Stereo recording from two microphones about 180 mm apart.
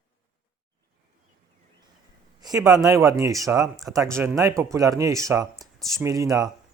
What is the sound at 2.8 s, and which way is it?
Speech, 20° right (ahead or behind).